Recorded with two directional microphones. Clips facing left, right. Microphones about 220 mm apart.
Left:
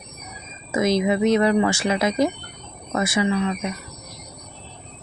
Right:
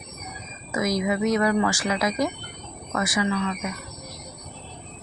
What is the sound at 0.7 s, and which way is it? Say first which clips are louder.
Speech: left 4 dB; 25° left (ahead or behind).